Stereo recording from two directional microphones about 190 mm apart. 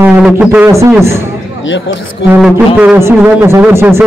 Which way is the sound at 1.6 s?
75° left (ahead or behind).